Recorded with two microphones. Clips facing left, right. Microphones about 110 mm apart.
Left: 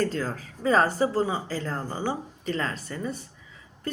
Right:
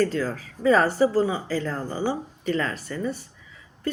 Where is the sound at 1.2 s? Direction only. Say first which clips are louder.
Right 3 dB; 40° left (ahead or behind).